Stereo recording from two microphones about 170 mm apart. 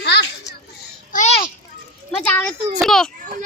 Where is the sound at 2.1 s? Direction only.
5° left (ahead or behind).